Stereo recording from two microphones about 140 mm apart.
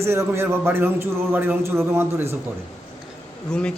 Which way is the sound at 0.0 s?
20° right (ahead or behind).